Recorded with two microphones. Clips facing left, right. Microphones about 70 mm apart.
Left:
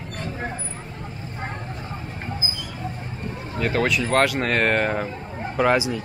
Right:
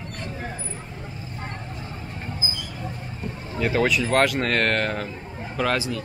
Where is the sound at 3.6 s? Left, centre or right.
Centre.